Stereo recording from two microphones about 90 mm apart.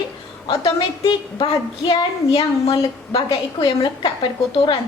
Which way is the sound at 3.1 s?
65° left (ahead or behind).